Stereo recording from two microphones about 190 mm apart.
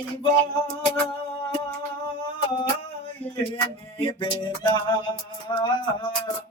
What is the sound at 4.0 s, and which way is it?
Speech, 25° left (ahead or behind).